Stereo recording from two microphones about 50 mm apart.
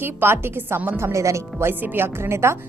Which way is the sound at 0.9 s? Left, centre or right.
Right.